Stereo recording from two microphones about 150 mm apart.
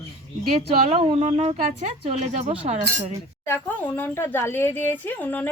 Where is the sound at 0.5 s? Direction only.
45° right (ahead or behind).